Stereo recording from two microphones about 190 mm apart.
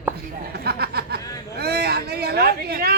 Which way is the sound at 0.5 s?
55° right (ahead or behind).